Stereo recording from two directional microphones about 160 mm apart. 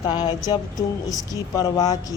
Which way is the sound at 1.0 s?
25° left (ahead or behind).